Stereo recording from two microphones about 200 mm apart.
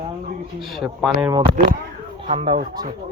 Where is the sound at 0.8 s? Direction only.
5° right (ahead or behind).